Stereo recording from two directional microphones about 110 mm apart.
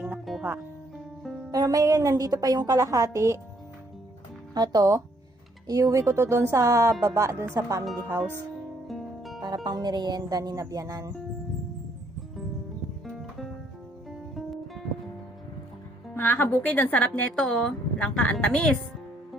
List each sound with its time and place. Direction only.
0.3 s music: centre (ahead or behind)
1.5 s a woman's voice: 35° right (ahead or behind)
4.5 s a woman's voice: 35° right (ahead or behind)
8.9 s music: centre (ahead or behind)
9.6 s a woman's voice: 40° right (ahead or behind)
13.1 s music: centre (ahead or behind)
16.1 s speech: 20° left (ahead or behind)